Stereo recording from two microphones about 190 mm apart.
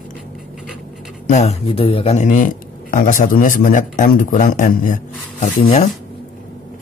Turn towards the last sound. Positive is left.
turn(degrees=40)  # may be behind; listen again after turning